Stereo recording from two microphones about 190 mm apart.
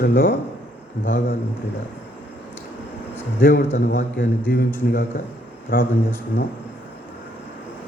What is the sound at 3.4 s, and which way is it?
A man's voice, 50° left (ahead or behind).